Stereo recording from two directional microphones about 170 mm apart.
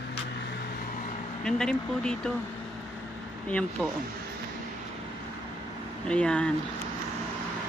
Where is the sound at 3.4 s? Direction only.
5° left (ahead or behind).